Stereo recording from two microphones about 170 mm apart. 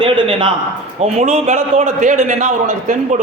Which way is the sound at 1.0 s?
40° right (ahead or behind).